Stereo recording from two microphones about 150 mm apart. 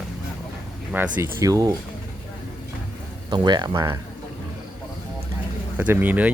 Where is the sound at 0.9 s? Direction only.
15° right (ahead or behind).